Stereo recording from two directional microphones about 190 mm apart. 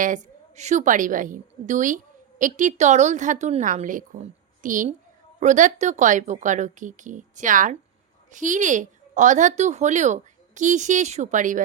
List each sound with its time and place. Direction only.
0.0 s a woman's voice: 40° right (ahead or behind)